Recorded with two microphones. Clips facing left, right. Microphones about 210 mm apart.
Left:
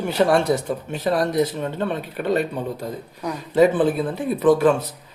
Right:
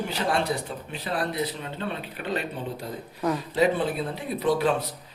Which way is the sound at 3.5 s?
50° left (ahead or behind).